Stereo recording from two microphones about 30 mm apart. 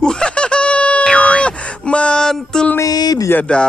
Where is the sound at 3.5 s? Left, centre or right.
Left.